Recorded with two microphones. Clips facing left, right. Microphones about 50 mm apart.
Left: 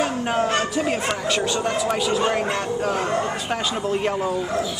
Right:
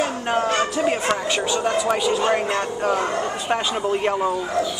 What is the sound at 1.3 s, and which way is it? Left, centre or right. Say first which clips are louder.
Speech: right 1 dB; centre.